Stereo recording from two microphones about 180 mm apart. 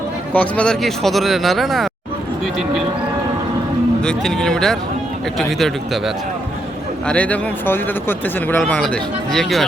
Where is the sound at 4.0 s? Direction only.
5° left (ahead or behind).